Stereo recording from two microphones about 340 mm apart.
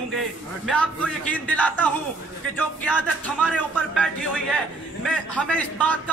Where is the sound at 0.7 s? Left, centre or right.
Centre.